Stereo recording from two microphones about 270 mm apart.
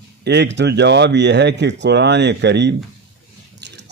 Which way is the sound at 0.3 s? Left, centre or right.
Right.